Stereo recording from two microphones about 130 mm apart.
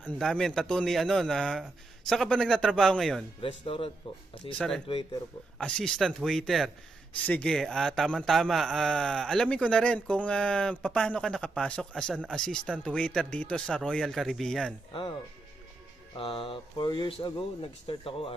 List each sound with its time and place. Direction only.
0.2 s a man's voice: 5° left (ahead or behind)
3.3 s speech: 45° left (ahead or behind)
4.6 s a man's voice: 5° left (ahead or behind)
14.9 s speech: 40° left (ahead or behind)
16.2 s speech: 45° left (ahead or behind)